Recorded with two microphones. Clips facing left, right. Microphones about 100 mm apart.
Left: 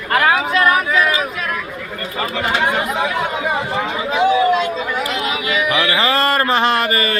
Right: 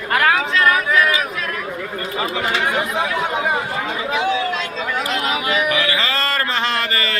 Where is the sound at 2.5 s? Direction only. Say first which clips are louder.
Left 4 dB; 20° left (ahead or behind).